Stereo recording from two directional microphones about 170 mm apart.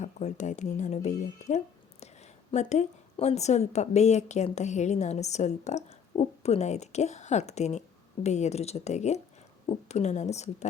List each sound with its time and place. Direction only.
0.0 s a woman's voice: 45° left (ahead or behind)